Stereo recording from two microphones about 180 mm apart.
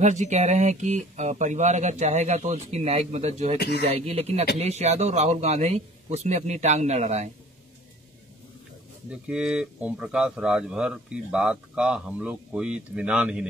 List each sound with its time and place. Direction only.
0.0 s speech: 40° right (ahead or behind)
3.5 s speech: 65° left (ahead or behind)
3.8 s speech: 35° right (ahead or behind)
9.1 s speech: 5° right (ahead or behind)